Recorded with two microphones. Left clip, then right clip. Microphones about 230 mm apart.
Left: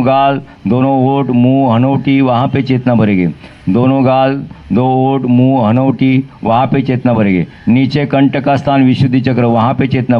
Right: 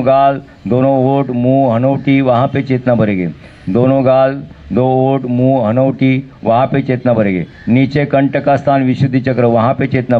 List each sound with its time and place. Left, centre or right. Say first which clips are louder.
0.0 s speech: even; left